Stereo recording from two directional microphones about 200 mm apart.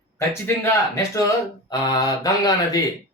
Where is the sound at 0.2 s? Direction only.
15° left (ahead or behind).